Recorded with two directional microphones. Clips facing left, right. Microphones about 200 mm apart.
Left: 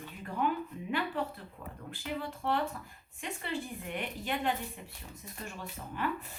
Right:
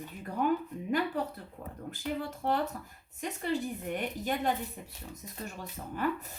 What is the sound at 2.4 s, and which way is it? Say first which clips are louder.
A woman's voice: right 2 dB; 45° right (ahead or behind).